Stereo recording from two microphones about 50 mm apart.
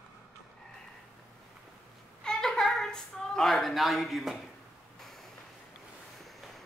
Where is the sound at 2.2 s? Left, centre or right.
Centre.